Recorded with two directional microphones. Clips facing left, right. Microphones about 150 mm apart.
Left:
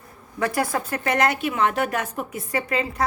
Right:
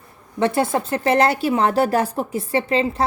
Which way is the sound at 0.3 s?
25° right (ahead or behind).